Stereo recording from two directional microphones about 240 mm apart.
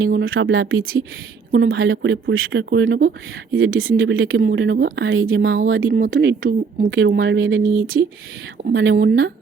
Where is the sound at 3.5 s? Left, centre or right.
Right.